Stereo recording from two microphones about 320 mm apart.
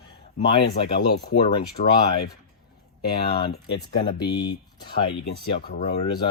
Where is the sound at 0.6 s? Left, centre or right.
Left.